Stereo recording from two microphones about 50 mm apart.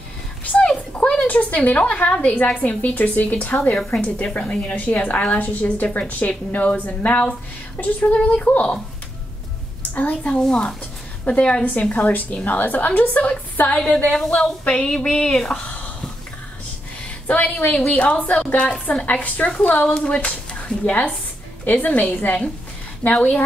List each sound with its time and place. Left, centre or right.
0.7 s a sound: left
2.2 s a woman's voice: left
9.9 s a woman's voice: left
13.7 s speech: centre
15.6 s a sound: left
17.3 s a woman's voice: left
19.9 s speech: centre
21.6 s a woman's voice: left